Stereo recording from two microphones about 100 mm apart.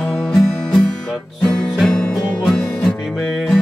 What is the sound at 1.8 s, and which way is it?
Music, 5° left (ahead or behind).